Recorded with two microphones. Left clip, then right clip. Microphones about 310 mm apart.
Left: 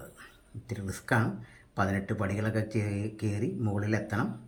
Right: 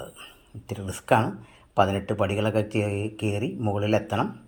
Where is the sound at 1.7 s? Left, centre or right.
Right.